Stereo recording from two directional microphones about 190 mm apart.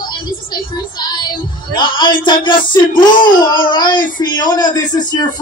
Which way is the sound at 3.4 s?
25° left (ahead or behind).